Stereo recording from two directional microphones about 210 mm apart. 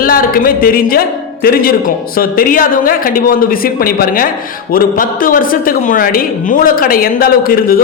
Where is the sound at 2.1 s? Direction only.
40° left (ahead or behind).